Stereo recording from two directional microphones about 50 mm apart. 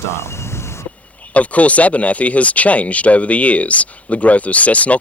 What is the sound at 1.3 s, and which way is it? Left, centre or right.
Speech, left.